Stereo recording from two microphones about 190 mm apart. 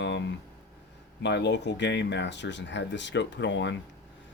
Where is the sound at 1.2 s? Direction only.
65° left (ahead or behind).